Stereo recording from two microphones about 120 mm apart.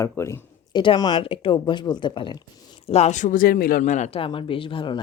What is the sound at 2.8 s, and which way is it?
Speech, 60° left (ahead or behind).